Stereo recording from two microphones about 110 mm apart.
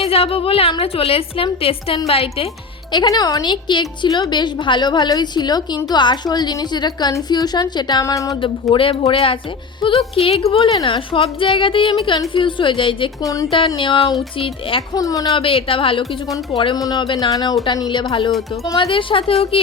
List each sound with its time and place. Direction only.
0.0 s a woman's voice: 60° left (ahead or behind)
2.9 s a woman's voice: 40° left (ahead or behind)
8.7 s a woman's voice: 55° left (ahead or behind)
13.2 s a woman's voice: 30° left (ahead or behind)
13.7 s a woman's voice: 50° left (ahead or behind)
14.9 s a woman's voice: 30° left (ahead or behind)
15.4 s a woman's voice: 55° left (ahead or behind)
16.7 s a woman's voice: 40° left (ahead or behind); by 19.6 s 60° left (ahead or behind)